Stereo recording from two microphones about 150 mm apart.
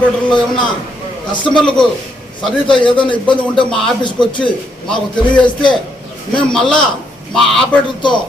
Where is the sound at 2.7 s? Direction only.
35° left (ahead or behind).